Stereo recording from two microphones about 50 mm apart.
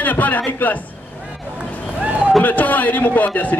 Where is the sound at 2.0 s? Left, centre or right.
Right.